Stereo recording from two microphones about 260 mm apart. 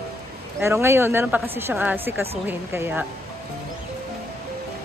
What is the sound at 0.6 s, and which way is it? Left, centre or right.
A woman's voice, centre.